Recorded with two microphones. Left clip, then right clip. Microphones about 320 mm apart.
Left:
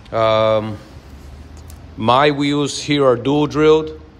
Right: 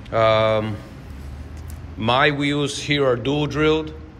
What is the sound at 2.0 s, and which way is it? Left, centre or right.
Speech, centre.